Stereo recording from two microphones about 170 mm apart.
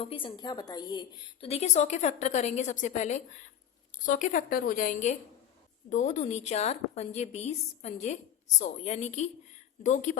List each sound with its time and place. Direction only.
0.0 s a woman's voice: 30° left (ahead or behind)
1.5 s a woman's voice: 40° left (ahead or behind)